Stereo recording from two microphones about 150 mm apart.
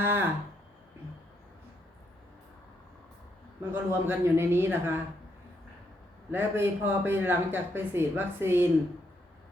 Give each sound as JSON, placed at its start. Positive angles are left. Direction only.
{"t": 0.0, "sound": "speech", "side_deg": -15}
{"t": 3.7, "sound": "speech", "side_deg": -15}
{"t": 6.3, "sound": "speech", "side_deg": -15}